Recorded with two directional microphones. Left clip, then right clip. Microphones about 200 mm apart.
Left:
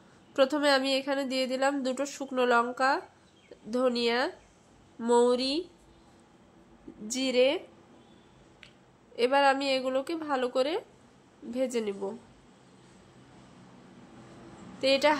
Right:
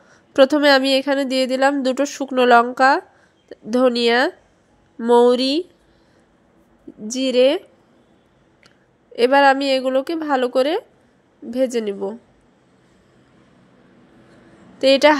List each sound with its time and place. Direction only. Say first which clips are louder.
0.3 s a woman's voice: right 11 dB; 35° right (ahead or behind)
7.1 s speech: right 10 dB; 25° right (ahead or behind)
8.6 s speech: right 8 dB; 35° right (ahead or behind)
14.8 s a woman's voice: right 11 dB; 35° right (ahead or behind)